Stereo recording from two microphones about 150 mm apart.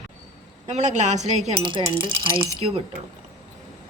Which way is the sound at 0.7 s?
50° right (ahead or behind).